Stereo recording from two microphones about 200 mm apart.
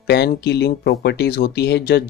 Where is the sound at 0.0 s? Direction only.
55° left (ahead or behind).